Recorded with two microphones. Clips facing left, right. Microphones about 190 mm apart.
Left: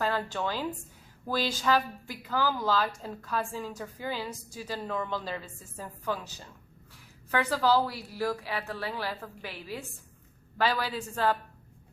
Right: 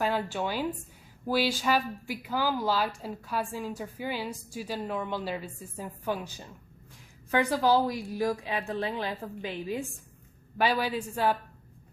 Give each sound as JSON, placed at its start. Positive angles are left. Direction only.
{"t": 0.0, "sound": "a woman's voice", "side_deg": -10}